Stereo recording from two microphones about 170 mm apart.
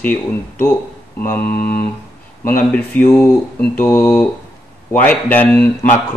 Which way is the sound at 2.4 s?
10° left (ahead or behind).